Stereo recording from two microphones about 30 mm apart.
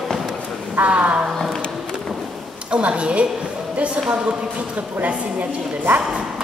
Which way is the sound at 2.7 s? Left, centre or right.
Right.